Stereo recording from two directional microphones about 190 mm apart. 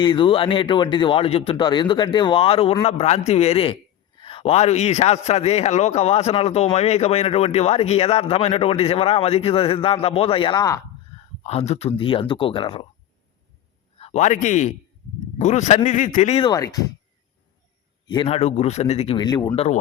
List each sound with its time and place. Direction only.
0.0 s a man's voice: 25° left (ahead or behind)
11.4 s speech: 35° left (ahead or behind)
14.0 s a man's voice: 35° left (ahead or behind)
16.5 s speech: 20° left (ahead or behind)
18.1 s a man's voice: 30° left (ahead or behind)
19.5 s a man's voice: 35° left (ahead or behind)